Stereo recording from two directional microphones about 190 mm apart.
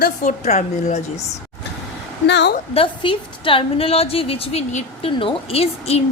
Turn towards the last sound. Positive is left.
turn(degrees=30)  # may be behind; listen again after turning